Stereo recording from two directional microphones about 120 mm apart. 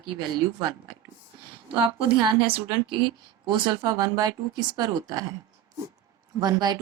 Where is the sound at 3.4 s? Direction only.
40° right (ahead or behind).